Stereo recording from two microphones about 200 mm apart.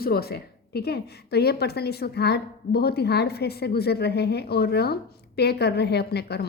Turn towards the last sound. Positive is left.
turn(degrees=55)  # may be behind; listen again after turning